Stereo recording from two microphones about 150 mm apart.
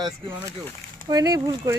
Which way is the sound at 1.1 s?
25° right (ahead or behind).